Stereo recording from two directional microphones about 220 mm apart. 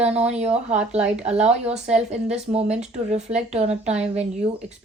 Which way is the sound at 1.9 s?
30° right (ahead or behind).